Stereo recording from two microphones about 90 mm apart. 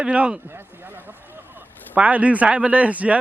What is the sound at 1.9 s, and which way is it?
A man's voice, 15° right (ahead or behind).